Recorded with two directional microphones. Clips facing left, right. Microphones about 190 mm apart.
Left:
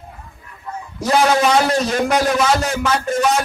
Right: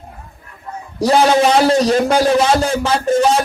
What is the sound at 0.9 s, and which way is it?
A man's voice, 30° right (ahead or behind).